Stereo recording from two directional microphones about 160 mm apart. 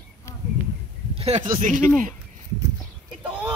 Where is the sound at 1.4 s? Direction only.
55° right (ahead or behind).